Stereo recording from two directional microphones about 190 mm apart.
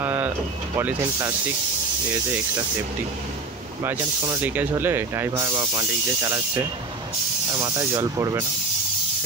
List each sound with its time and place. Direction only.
0.0 s a sound: 10° right (ahead or behind)
0.7 s speech: 15° right (ahead or behind)
3.8 s speech: 10° right (ahead or behind)